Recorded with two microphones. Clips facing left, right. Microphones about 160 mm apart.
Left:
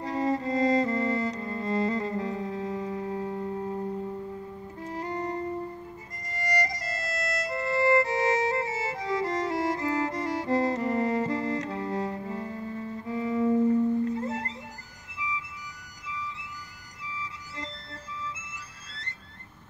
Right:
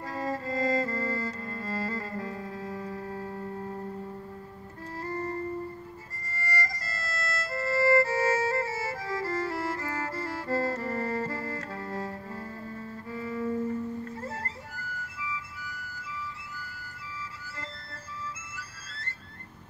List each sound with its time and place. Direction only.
0.0 s music: 20° left (ahead or behind)
4.9 s music: 15° left (ahead or behind)